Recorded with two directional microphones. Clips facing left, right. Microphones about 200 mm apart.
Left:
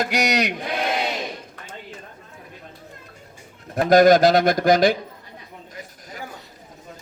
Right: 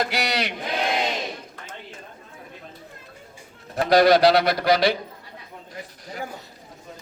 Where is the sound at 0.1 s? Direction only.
45° left (ahead or behind).